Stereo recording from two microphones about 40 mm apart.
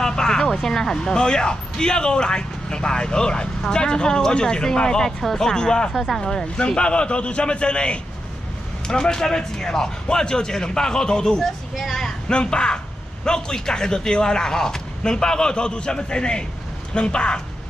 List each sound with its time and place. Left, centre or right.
0.0 s a man's voice: centre
5.9 s speech: centre
6.4 s a man's voice: left
11.7 s speech: centre
12.3 s a man's voice: left